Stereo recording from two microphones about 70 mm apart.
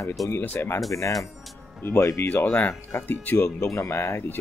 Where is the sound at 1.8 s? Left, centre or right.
Left.